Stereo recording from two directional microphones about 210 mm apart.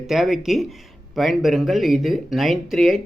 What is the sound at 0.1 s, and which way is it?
Speech, centre (ahead or behind).